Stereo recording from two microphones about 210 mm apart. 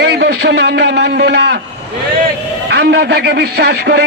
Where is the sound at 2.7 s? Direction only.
50° right (ahead or behind).